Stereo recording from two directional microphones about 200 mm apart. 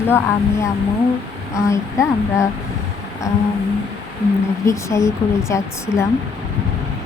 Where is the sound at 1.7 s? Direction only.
15° left (ahead or behind).